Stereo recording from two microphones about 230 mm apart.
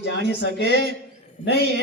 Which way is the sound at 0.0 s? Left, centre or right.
Left.